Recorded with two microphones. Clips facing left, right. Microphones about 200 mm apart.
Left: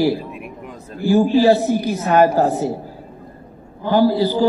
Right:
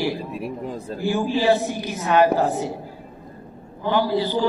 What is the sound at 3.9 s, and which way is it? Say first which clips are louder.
Speech: left 6 dB; 40° left (ahead or behind).